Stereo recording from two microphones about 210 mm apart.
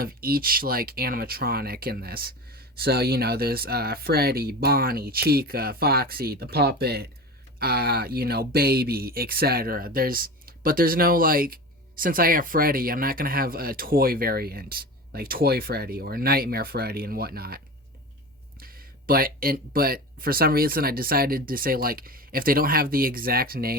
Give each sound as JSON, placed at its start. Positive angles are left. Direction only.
{"t": 0.0, "sound": "speech", "side_deg": -45}
{"t": 18.6, "sound": "speech", "side_deg": -45}